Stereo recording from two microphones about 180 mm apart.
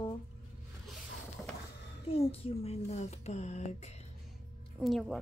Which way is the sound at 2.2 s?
35° left (ahead or behind).